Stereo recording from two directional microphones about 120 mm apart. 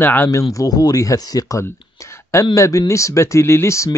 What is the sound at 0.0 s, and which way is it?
Speech, 20° left (ahead or behind).